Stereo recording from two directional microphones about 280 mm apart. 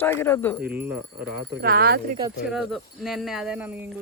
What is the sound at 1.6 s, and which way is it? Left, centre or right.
Speech, right.